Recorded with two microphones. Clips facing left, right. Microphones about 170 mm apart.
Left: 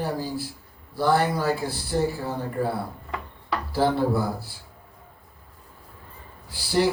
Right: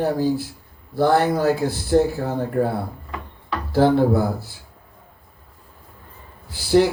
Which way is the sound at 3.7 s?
50° right (ahead or behind).